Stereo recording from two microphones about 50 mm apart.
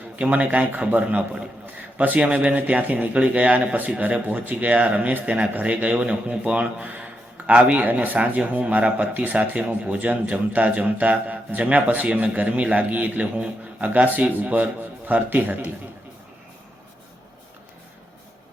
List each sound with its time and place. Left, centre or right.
0.2 s a man's voice: right